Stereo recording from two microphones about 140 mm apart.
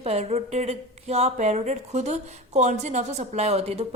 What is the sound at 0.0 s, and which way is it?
Speech, 50° right (ahead or behind).